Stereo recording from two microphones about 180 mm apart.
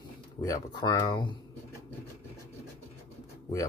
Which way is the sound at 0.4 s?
20° left (ahead or behind).